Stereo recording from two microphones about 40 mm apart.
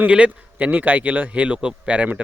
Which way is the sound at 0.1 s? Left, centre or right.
Right.